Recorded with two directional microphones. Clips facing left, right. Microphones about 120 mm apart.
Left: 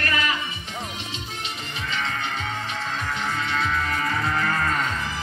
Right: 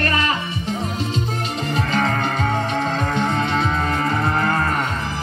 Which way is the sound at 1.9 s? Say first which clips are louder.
Right 6 dB; 45° right (ahead or behind).